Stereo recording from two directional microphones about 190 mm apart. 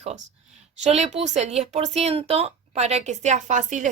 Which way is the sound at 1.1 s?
35° right (ahead or behind).